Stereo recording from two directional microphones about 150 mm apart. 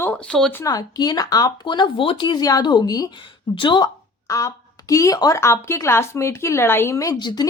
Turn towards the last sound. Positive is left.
turn(degrees=30)  # may be behind; listen again after turning